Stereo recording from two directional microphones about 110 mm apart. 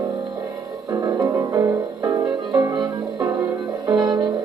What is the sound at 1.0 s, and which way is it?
Music, 30° right (ahead or behind).